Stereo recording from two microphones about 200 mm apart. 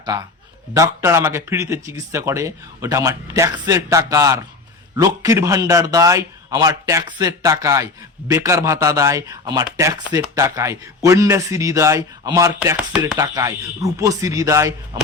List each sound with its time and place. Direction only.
0.1 s speech: 15° right (ahead or behind)
13.1 s speech: 15° right (ahead or behind)